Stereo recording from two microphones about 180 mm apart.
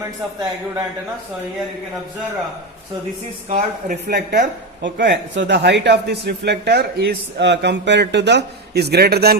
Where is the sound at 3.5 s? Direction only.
55° right (ahead or behind).